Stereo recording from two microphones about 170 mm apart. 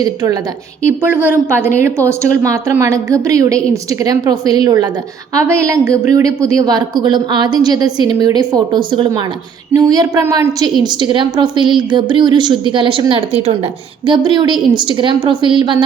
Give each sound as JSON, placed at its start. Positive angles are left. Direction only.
{"t": 0.0, "sound": "a woman's voice", "side_deg": -20}
{"t": 0.9, "sound": "a woman's voice", "side_deg": -10}